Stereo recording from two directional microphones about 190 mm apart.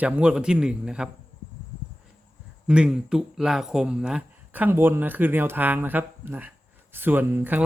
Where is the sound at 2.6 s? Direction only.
5° right (ahead or behind).